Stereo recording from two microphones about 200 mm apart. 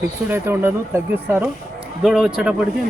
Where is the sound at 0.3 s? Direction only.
10° right (ahead or behind).